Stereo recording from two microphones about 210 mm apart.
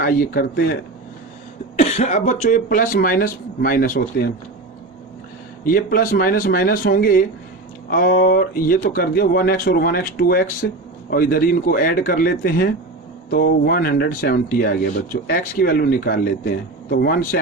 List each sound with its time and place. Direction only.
0.0 s speech: 45° left (ahead or behind)
1.8 s speech: 30° left (ahead or behind)
5.6 s speech: 45° left (ahead or behind)